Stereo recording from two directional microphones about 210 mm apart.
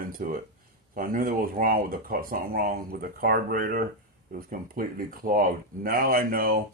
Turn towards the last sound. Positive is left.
turn(degrees=-45)  # may be behind; listen again after turning